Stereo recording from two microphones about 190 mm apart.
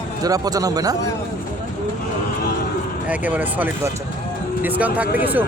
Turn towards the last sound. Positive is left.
turn(degrees=-10)  # may be behind; listen again after turning